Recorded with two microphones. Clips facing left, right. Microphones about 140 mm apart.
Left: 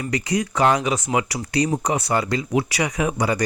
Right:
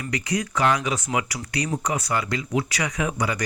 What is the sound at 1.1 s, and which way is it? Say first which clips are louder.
Speech: left 5 dB; 35° left (ahead or behind).